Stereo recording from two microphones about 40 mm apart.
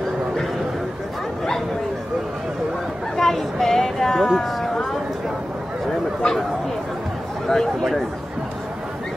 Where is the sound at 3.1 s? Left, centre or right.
Centre.